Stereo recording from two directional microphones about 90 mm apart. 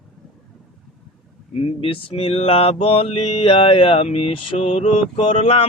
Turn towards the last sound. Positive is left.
turn(degrees=90)